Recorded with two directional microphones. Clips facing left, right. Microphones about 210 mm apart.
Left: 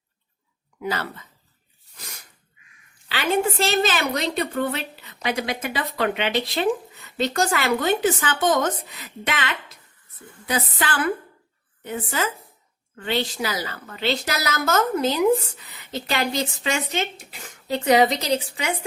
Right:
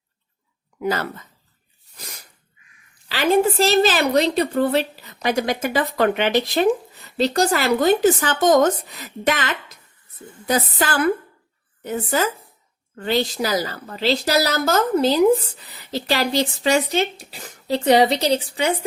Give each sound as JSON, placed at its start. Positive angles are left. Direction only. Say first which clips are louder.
{"t": 0.8, "sound": "speech", "louder": "right 5 dB", "side_deg": -45}
{"t": 3.6, "sound": "a woman's voice", "louder": "right 5 dB", "side_deg": -35}